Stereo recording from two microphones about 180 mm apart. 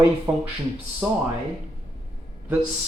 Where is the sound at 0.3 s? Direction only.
10° right (ahead or behind).